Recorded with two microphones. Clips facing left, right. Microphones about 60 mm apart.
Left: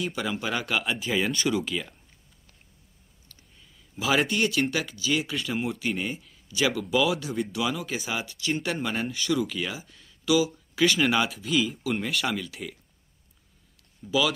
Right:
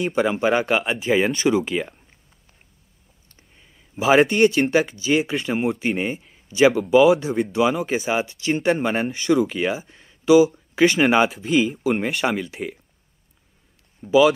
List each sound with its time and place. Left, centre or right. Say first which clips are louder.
0.0 s speech: right 10 dB; right
3.3 s speech: right 2 dB; right
14.0 s speech: right 10 dB; right